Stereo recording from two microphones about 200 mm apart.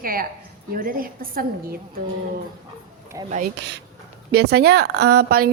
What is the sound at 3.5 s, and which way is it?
A woman's voice, 60° right (ahead or behind).